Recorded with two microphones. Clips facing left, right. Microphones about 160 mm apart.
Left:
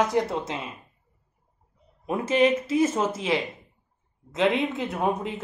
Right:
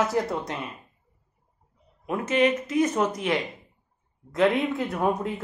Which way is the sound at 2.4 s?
10° left (ahead or behind).